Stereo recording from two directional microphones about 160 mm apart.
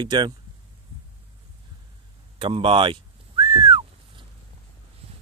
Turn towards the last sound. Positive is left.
turn(degrees=-30)  # may be behind; listen again after turning